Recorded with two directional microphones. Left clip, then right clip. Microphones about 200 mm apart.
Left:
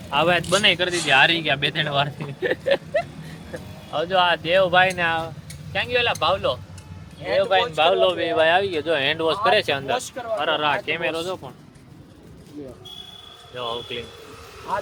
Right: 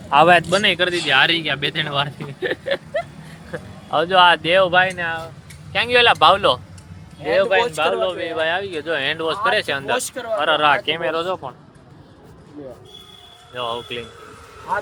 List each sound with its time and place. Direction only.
0.1 s speech: 30° right (ahead or behind)
0.5 s speech: 10° right (ahead or behind)
2.6 s a sound: 10° left (ahead or behind)
3.9 s speech: 25° right (ahead or behind)
4.7 s speech: 5° right (ahead or behind)
4.9 s speech: 15° left (ahead or behind)
5.9 s speech: 35° right (ahead or behind)
7.8 s speech: 5° left (ahead or behind)
10.3 s speech: 10° right (ahead or behind)
11.0 s speech: 10° left (ahead or behind)
13.6 s speech: 15° right (ahead or behind)